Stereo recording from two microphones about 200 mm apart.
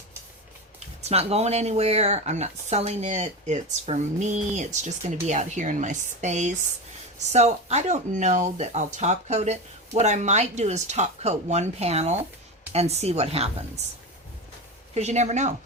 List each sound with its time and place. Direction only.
1.0 s speech: 30° right (ahead or behind)
14.9 s speech: 35° right (ahead or behind)